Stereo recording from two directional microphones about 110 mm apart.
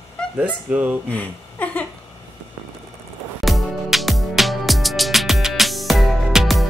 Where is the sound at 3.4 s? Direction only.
Centre (ahead or behind).